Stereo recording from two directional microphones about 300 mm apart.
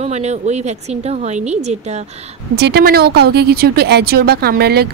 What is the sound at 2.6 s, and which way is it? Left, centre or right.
Speech, right.